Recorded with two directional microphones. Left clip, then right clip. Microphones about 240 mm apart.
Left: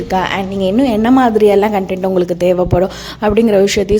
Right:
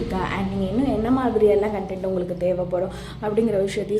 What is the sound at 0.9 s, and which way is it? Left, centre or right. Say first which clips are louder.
A woman's voice: left 10 dB; left.